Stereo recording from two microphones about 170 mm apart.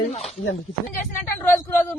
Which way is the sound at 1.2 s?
10° left (ahead or behind).